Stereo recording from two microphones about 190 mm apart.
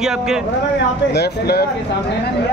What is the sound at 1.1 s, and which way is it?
Speech, 60° left (ahead or behind).